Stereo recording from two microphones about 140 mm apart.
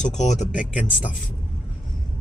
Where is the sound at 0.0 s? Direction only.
55° left (ahead or behind).